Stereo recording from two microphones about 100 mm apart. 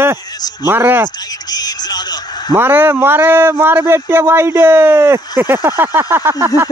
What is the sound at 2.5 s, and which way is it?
Speech, 20° right (ahead or behind).